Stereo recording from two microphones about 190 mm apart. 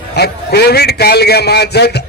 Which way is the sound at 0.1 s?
60° left (ahead or behind).